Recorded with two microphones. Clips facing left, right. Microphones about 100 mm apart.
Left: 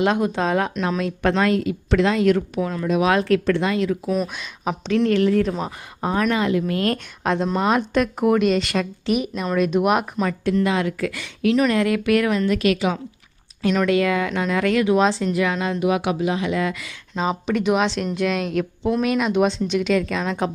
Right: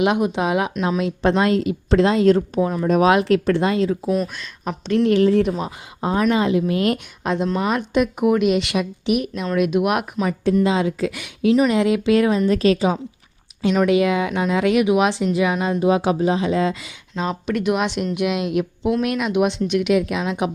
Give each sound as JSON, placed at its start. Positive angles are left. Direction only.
{"t": 0.0, "sound": "a woman's voice", "side_deg": -15}
{"t": 2.8, "sound": "a woman's voice", "side_deg": -40}
{"t": 3.1, "sound": "a woman's voice", "side_deg": -20}
{"t": 4.1, "sound": "speech", "side_deg": 5}
{"t": 5.2, "sound": "a woman's voice", "side_deg": -25}
{"t": 7.3, "sound": "speech", "side_deg": 0}
{"t": 10.6, "sound": "a woman's voice", "side_deg": -20}
{"t": 13.8, "sound": "speech", "side_deg": -20}
{"t": 15.8, "sound": "a woman's voice", "side_deg": -30}
{"t": 17.2, "sound": "speech", "side_deg": 0}
{"t": 17.8, "sound": "speech", "side_deg": -15}
{"t": 19.6, "sound": "speech", "side_deg": -55}
{"t": 19.9, "sound": "speech", "side_deg": -10}